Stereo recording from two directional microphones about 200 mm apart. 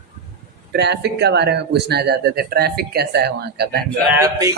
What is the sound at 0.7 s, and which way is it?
Speech, 55° right (ahead or behind).